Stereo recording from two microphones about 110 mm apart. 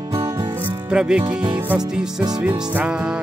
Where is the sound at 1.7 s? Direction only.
10° right (ahead or behind).